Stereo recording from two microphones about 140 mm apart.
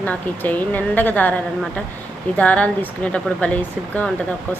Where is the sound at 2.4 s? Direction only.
10° left (ahead or behind).